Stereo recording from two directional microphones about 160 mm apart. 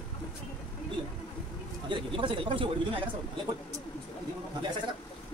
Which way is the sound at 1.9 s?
30° right (ahead or behind).